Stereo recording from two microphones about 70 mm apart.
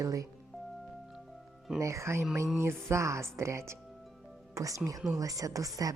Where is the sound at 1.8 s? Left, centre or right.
Right.